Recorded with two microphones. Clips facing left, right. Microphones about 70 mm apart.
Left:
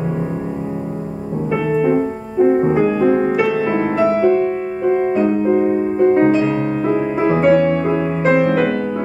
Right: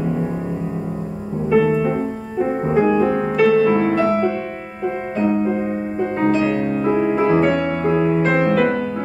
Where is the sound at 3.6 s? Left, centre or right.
Left.